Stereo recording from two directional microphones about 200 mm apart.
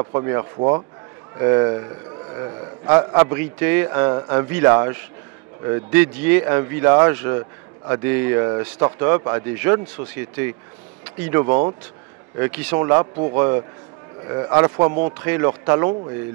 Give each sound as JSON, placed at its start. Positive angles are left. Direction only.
{"t": 0.0, "sound": "speech", "side_deg": -20}